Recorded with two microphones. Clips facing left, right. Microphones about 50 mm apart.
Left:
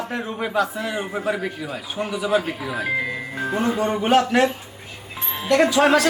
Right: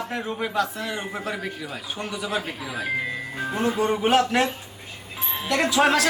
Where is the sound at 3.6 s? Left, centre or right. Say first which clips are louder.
Left 1 dB; centre.